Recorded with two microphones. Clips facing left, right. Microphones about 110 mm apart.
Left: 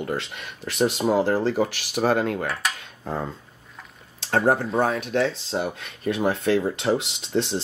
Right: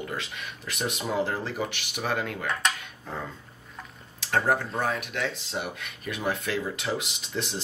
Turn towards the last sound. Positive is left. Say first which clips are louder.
# left 8 dB
turn(degrees=30)  # may be behind; listen again after turning